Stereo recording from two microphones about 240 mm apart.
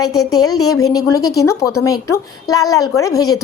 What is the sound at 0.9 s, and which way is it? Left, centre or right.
A woman's voice, centre.